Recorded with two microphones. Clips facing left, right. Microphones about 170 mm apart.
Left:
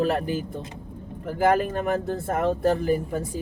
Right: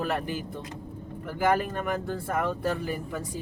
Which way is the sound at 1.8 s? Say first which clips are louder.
Left 5 dB; 35° left (ahead or behind).